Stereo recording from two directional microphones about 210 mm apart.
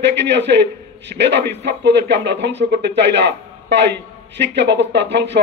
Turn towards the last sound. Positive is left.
turn(degrees=-55)  # may be behind; listen again after turning